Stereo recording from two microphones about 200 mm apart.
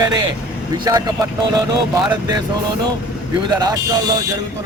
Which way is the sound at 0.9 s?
20° right (ahead or behind).